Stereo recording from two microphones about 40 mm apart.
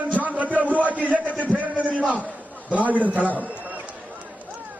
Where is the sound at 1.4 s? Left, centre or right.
Right.